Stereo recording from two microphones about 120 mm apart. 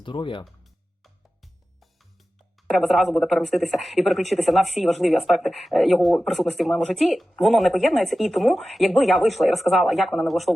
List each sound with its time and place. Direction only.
0.0 s speech: 45° left (ahead or behind)
0.4 s music: centre (ahead or behind)
2.6 s speech: centre (ahead or behind)